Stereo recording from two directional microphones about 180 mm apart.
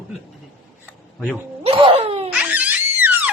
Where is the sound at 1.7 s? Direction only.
30° right (ahead or behind).